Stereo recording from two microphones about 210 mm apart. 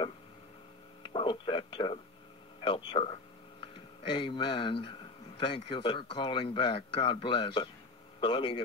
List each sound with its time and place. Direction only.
1.0 s speech: 25° left (ahead or behind)